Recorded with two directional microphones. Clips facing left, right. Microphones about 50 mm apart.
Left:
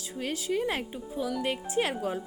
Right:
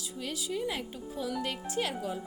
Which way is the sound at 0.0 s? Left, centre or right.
Left.